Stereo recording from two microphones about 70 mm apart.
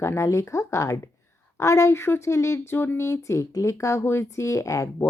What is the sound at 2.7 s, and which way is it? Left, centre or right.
Speech, left.